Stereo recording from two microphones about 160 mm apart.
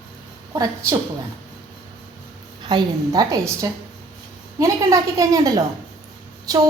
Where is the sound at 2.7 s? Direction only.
25° right (ahead or behind).